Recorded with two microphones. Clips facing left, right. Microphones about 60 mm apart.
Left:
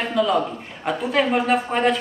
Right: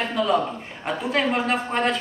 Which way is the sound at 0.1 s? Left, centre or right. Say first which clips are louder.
Left 2 dB; centre.